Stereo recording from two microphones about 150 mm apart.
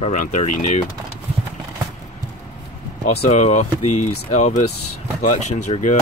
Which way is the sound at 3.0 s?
50° left (ahead or behind).